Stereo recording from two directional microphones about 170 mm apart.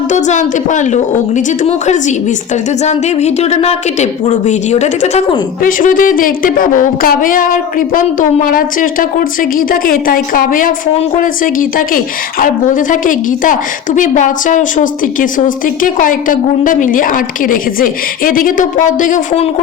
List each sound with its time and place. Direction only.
0.1 s a woman's voice: 45° left (ahead or behind)
5.6 s speech: 55° left (ahead or behind)